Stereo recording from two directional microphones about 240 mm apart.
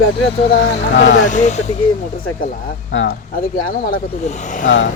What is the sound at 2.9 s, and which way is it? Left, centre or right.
Speech, left.